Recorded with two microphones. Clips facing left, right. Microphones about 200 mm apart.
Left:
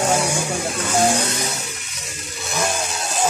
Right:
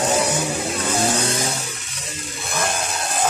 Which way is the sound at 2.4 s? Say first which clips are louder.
Left 1 dB; 55° right (ahead or behind).